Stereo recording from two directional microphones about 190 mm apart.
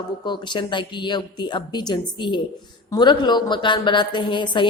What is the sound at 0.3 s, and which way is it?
A woman's voice, 25° left (ahead or behind).